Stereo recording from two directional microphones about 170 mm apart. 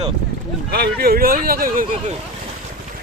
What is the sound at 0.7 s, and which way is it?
Speech, 65° right (ahead or behind).